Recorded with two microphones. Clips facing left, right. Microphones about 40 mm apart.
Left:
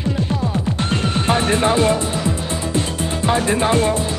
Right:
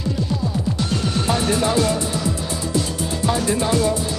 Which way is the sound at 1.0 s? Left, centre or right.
Left.